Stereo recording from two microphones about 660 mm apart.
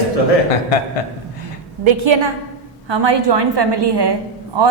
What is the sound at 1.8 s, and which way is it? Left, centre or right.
A woman's voice, right.